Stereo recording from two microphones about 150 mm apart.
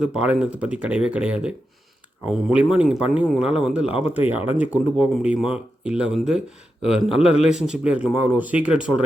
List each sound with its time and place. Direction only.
0.0 s speech: 5° right (ahead or behind)
4.2 s speech: 40° left (ahead or behind)
4.7 s speech: 5° right (ahead or behind)